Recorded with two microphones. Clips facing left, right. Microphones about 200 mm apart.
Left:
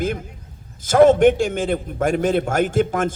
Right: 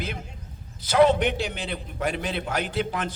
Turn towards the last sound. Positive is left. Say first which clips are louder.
# left 9 dB
turn(degrees=45)  # may be behind; listen again after turning